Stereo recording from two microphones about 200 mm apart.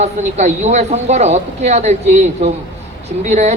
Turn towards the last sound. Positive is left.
turn(degrees=-35)  # may be behind; listen again after turning